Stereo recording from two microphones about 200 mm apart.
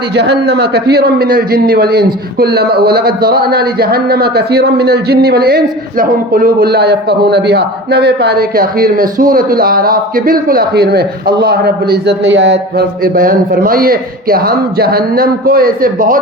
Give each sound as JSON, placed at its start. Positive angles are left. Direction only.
{"t": 0.1, "sound": "a man's voice", "side_deg": -55}